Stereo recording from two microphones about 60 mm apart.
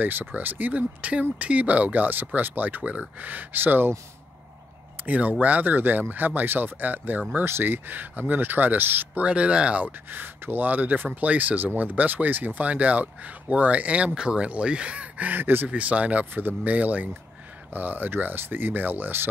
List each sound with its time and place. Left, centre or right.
0.0 s speech: right
5.0 s speech: right
9.2 s speech: centre
10.0 s speech: right
15.7 s speech: right